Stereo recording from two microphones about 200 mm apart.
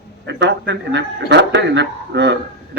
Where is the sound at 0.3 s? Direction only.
60° right (ahead or behind).